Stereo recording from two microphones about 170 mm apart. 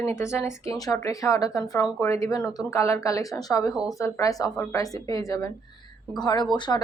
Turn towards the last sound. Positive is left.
turn(degrees=25)  # may be behind; listen again after turning